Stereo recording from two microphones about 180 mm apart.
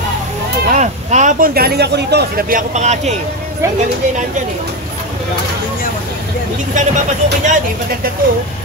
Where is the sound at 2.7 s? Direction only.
40° right (ahead or behind).